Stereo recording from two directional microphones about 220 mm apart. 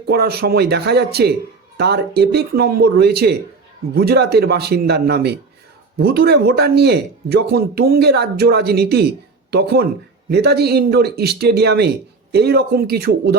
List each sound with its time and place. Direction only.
0.1 s speech: 45° right (ahead or behind)